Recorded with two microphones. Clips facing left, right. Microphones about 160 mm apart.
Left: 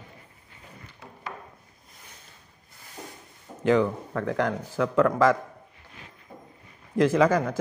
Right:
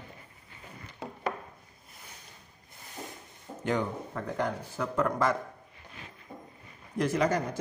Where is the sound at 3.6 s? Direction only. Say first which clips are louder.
Left 8 dB; 90° left.